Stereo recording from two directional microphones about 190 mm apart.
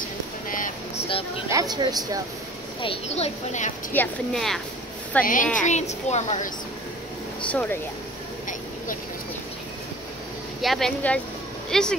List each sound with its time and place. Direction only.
0.5 s a sound: 45° left (ahead or behind)
1.5 s speech: 20° right (ahead or behind)
2.8 s a child's voice: 30° left (ahead or behind)
3.9 s a woman's voice: 5° left (ahead or behind)
5.2 s a woman's voice: 45° left (ahead or behind)
7.5 s speech: 10° left (ahead or behind)
10.6 s a woman's voice: centre (ahead or behind)